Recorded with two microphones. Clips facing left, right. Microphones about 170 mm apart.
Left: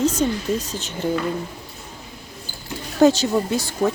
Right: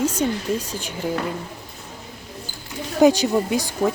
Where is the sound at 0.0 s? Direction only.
10° right (ahead or behind).